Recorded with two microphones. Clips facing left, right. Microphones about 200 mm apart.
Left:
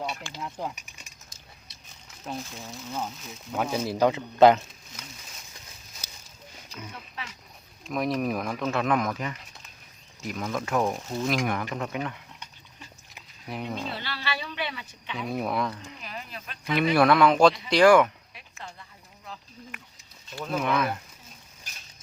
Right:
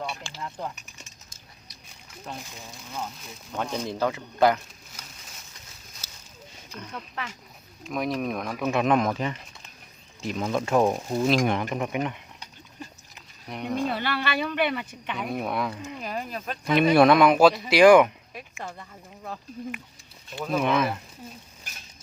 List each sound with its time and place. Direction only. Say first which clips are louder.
0.4 s speech: even; 5° left (ahead or behind)
2.3 s speech: left 4 dB; 5° left (ahead or behind)
3.5 s speech: left 2 dB; 5° left (ahead or behind); by 4.6 s 25° left (ahead or behind)
6.0 s a sound: left 3 dB; 15° left (ahead or behind)
7.9 s speech: left 1 dB; centre (ahead or behind)
8.6 s speech: right 4 dB; 15° right (ahead or behind)
13.5 s speech: right 4 dB; centre (ahead or behind)
13.8 s speech: right 7 dB; 55° right (ahead or behind)
15.3 s speech: left 1 dB; centre (ahead or behind)
16.0 s speech: right 8 dB; 45° right (ahead or behind)
16.9 s speech: right 2 dB; 20° right (ahead or behind)
18.6 s speech: right 4 dB; 50° right (ahead or behind)
20.5 s speech: right 3 dB; 20° right (ahead or behind)